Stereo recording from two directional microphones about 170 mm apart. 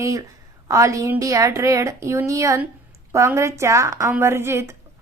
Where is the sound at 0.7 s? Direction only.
20° right (ahead or behind).